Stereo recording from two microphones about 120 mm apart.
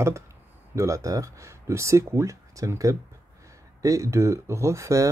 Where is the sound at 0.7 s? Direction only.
25° right (ahead or behind).